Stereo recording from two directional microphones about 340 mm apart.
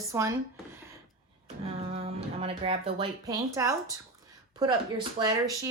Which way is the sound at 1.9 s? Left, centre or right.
Centre.